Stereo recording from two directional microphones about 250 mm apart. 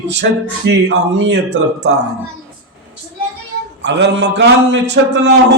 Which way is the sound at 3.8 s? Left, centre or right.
Right.